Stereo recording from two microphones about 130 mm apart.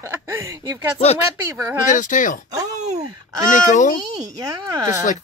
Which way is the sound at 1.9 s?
80° left.